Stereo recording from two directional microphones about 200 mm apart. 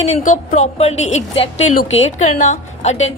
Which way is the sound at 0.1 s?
40° left (ahead or behind).